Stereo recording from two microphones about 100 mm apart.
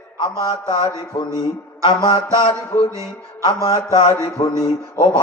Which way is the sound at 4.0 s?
75° left (ahead or behind).